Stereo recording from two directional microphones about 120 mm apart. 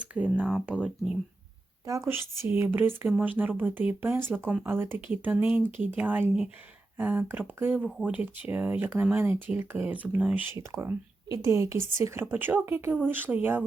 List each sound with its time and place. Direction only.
0.0 s speech: 10° right (ahead or behind)
1.9 s speech: 20° right (ahead or behind)
7.9 s speech: centre (ahead or behind)
8.1 s speech: 15° right (ahead or behind)
10.5 s speech: 20° right (ahead or behind)